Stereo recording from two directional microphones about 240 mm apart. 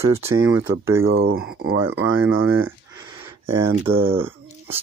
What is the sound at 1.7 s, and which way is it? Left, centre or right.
Speech, right.